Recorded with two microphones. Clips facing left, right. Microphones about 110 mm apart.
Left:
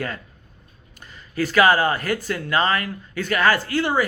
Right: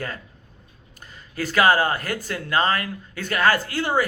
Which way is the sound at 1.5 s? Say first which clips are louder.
Left 1 dB; 40° right (ahead or behind).